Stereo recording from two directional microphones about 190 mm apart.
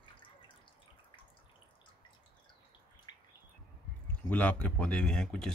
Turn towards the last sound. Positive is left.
turn(degrees=5)  # may be behind; listen again after turning